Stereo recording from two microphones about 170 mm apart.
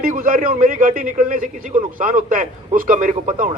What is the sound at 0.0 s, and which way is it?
A man's voice, 55° right (ahead or behind).